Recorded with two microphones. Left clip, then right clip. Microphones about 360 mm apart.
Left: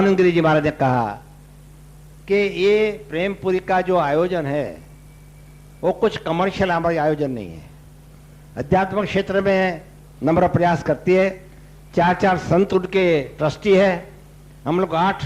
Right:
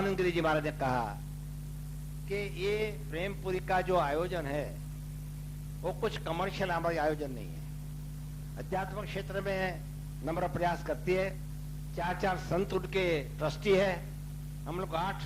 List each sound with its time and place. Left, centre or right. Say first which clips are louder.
0.0 s a man's voice: left 14 dB; left
2.2 s a man's voice: left 17 dB; left
5.8 s a man's voice: left 15 dB; left
8.5 s a man's voice: left 17 dB; left